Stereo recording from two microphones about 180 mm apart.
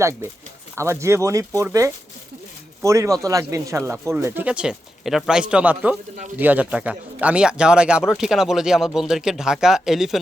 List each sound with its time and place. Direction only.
0.0 s speech: 15° right (ahead or behind)